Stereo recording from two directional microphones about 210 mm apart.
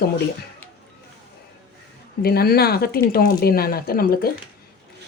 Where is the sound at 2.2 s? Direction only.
50° left (ahead or behind).